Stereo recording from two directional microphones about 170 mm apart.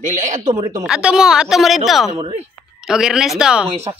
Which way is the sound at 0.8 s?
5° right (ahead or behind).